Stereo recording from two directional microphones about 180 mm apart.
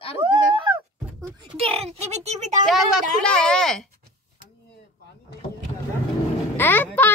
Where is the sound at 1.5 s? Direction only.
35° right (ahead or behind).